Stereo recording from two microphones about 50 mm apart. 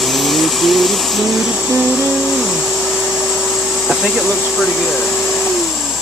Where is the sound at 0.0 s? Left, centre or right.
Centre.